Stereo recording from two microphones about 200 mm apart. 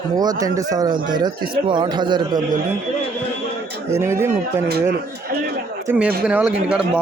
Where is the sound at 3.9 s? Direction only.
15° right (ahead or behind).